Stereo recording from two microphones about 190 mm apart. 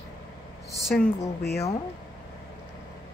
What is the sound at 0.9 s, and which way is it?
Speech, 5° left (ahead or behind).